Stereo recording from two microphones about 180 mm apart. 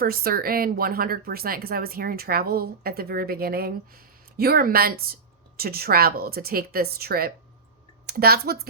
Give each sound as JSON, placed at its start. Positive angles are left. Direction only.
{"t": 0.0, "sound": "speech", "side_deg": -55}